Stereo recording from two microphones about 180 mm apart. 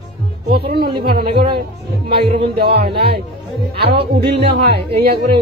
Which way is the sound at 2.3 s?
70° right (ahead or behind).